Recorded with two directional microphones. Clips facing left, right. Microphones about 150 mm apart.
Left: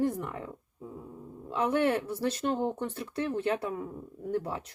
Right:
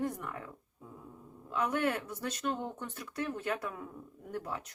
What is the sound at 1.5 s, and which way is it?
Speech, 30° left (ahead or behind).